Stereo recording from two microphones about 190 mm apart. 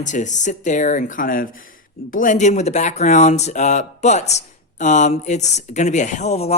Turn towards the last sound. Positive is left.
turn(degrees=35)  # may be behind; listen again after turning